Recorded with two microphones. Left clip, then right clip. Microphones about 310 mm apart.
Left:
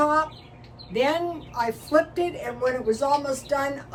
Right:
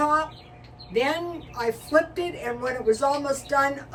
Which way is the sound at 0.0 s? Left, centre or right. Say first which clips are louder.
Left 1 dB; centre.